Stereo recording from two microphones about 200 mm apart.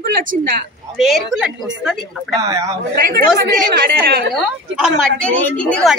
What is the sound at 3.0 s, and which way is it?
Speech, 45° right (ahead or behind).